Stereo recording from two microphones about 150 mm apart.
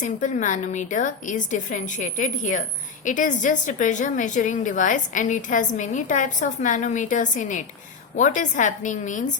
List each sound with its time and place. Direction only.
0.0 s a woman's voice: 60° left (ahead or behind)